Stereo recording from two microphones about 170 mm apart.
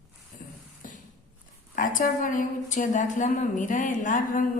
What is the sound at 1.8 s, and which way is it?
Speech, 50° left (ahead or behind).